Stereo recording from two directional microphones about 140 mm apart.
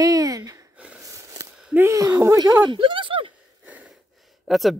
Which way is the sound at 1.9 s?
20° right (ahead or behind).